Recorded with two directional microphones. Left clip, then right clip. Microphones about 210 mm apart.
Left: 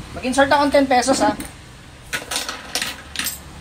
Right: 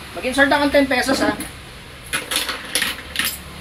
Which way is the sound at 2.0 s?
55° left (ahead or behind).